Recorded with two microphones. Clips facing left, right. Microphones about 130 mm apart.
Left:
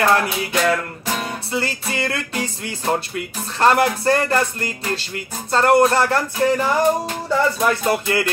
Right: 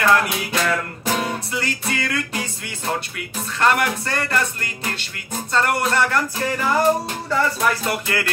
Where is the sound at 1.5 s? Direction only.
30° left (ahead or behind).